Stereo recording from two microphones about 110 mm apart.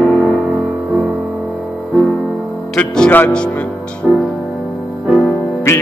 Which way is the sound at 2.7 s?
10° left (ahead or behind).